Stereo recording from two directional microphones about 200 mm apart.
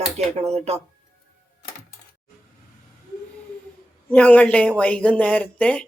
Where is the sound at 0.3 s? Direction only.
30° right (ahead or behind).